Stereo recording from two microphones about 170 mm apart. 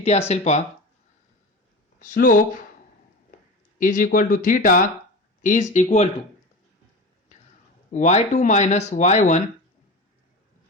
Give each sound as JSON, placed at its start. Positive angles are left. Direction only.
{"t": 0.0, "sound": "speech", "side_deg": 40}
{"t": 2.0, "sound": "speech", "side_deg": 50}
{"t": 3.8, "sound": "speech", "side_deg": 50}
{"t": 7.9, "sound": "speech", "side_deg": 45}